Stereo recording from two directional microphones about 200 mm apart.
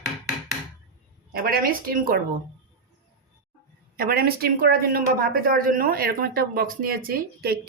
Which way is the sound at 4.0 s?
50° right (ahead or behind).